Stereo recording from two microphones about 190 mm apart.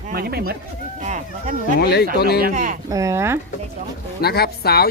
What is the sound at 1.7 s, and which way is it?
Speech, 60° left (ahead or behind).